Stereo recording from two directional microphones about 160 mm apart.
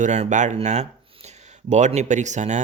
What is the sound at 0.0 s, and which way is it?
Speech, 50° right (ahead or behind).